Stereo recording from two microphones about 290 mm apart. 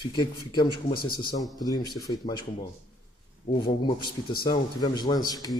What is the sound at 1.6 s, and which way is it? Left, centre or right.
Speech, centre.